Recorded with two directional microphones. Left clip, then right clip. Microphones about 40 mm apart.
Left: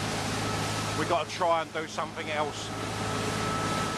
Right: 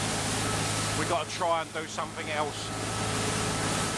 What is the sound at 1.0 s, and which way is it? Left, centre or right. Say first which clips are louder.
Speech: left 3 dB; left.